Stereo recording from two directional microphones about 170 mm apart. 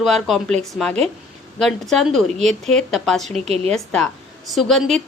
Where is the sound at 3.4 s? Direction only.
35° right (ahead or behind).